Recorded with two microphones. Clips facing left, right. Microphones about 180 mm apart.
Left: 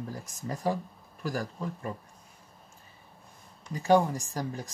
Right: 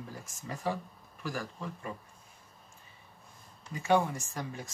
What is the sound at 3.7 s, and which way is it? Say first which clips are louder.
Speech: left 4 dB; 35° left (ahead or behind).